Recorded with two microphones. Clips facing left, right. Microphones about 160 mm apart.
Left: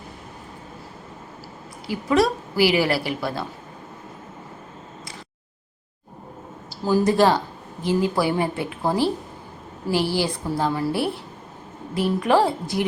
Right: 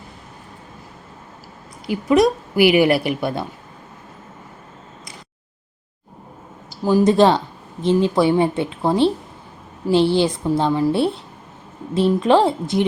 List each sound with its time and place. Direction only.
1.9 s a woman's voice: 20° right (ahead or behind)
6.7 s a woman's voice: 15° right (ahead or behind)